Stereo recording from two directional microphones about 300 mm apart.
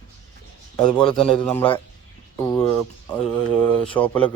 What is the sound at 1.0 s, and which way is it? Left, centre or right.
Speech, centre.